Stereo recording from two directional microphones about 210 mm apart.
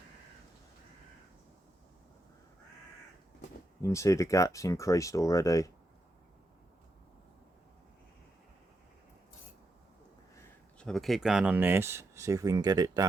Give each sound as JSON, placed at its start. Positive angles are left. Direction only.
{"t": 3.8, "sound": "speech", "side_deg": 15}
{"t": 10.8, "sound": "speech", "side_deg": 0}